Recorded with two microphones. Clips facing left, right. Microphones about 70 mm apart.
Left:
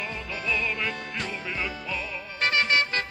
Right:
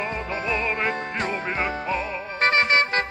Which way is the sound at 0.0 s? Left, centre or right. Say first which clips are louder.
Right 5 dB; right.